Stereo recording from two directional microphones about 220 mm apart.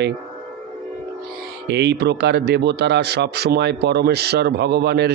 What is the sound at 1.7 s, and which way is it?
Speech, 50° right (ahead or behind).